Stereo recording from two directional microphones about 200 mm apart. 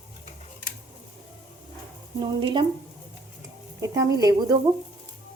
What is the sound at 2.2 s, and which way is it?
Speech, 25° right (ahead or behind).